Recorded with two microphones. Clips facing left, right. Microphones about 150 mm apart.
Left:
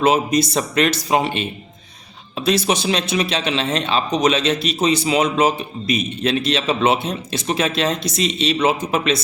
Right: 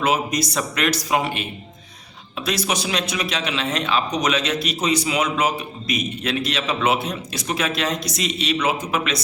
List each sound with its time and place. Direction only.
0.0 s a man's voice: 25° left (ahead or behind)